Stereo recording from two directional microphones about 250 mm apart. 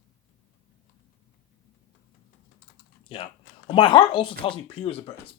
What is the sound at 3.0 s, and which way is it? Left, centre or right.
Typing, left.